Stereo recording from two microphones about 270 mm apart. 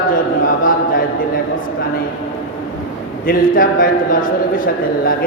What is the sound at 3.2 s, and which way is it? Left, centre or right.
A man's voice, left.